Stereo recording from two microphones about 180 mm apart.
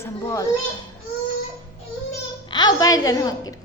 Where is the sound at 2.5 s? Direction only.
25° left (ahead or behind).